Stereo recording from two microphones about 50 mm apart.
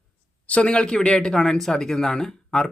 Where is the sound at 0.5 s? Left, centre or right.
Left.